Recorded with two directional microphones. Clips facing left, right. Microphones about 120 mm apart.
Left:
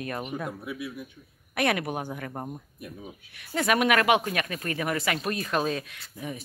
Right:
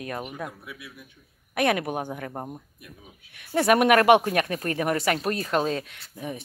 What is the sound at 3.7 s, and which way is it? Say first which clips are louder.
Speech: right 5 dB; 50° right (ahead or behind).